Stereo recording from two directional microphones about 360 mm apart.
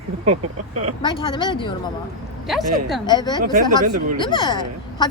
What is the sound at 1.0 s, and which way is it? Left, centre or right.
Speech, centre.